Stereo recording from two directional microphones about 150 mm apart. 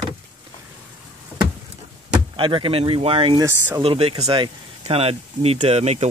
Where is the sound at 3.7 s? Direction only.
40° right (ahead or behind).